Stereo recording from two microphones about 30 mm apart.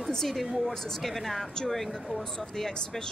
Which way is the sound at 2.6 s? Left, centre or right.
Left.